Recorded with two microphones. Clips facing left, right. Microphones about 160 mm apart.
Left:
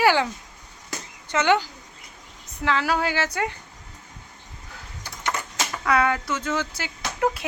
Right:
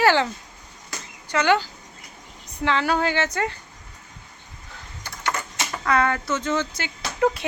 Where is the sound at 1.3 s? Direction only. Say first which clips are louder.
Even; 20° left (ahead or behind).